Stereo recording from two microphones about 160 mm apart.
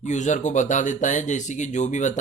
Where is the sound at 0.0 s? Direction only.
50° left (ahead or behind).